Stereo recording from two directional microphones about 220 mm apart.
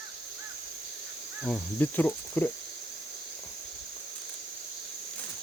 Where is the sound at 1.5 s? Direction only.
10° left (ahead or behind).